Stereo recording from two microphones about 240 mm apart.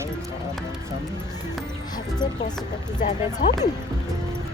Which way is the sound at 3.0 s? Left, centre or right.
Left.